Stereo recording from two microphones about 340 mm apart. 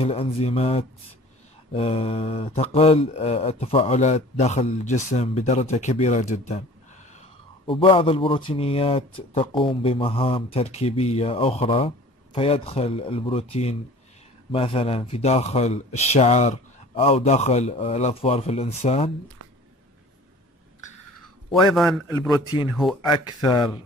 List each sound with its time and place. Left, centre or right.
0.0 s a man's voice: centre
7.6 s a man's voice: centre
21.7 s a man's voice: centre
23.0 s a man's voice: centre